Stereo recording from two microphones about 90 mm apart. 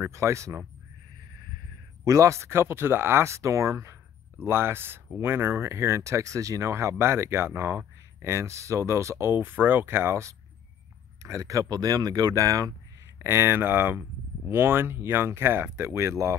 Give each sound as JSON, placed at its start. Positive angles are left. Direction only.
{"t": 0.0, "sound": "speech", "side_deg": -30}
{"t": 2.0, "sound": "speech", "side_deg": -35}
{"t": 13.2, "sound": "speech", "side_deg": -25}